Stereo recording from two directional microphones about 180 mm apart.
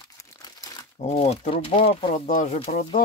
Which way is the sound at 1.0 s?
35° left (ahead or behind).